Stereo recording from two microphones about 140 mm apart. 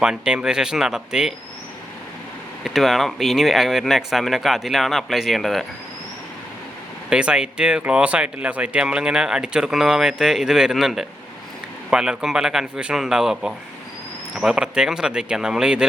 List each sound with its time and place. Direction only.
0.0 s speech: 5° right (ahead or behind)
2.6 s speech: centre (ahead or behind)
7.1 s speech: 5° right (ahead or behind)